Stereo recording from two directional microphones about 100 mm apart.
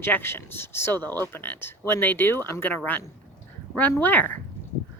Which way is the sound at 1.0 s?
40° right (ahead or behind).